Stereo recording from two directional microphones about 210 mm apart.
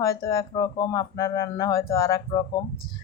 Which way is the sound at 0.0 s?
15° left (ahead or behind).